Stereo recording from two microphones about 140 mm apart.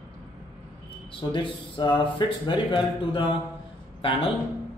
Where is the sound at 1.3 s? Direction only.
35° left (ahead or behind).